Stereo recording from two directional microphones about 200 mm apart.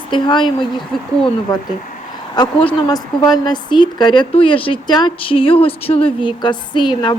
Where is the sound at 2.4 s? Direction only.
25° left (ahead or behind).